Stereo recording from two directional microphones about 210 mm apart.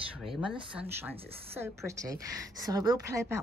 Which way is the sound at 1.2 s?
30° right (ahead or behind).